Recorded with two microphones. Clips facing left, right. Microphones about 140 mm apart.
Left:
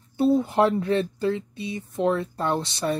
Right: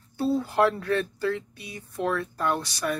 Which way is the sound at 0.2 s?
20° left (ahead or behind).